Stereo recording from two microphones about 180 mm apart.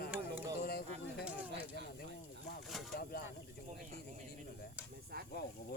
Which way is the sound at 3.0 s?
60° left (ahead or behind).